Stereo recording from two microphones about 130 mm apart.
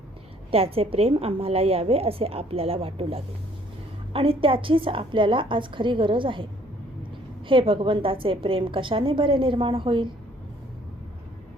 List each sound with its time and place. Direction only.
0.5 s a woman's voice: 50° right (ahead or behind)